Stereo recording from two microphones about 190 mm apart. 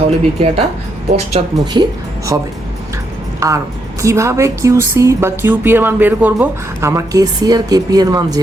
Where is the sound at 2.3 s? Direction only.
15° right (ahead or behind).